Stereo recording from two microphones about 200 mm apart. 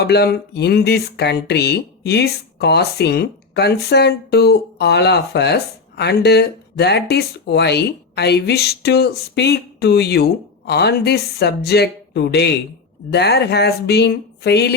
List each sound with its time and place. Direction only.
0.0 s speech: 55° left (ahead or behind)